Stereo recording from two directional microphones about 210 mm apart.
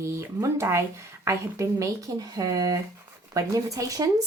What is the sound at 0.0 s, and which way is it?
Speech, 15° right (ahead or behind).